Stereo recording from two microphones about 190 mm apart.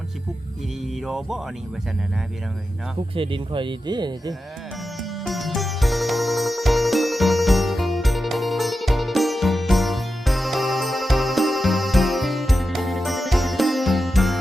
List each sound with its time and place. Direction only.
1.0 s speech: centre (ahead or behind)
3.2 s speech: 25° right (ahead or behind)
5.2 s music: centre (ahead or behind)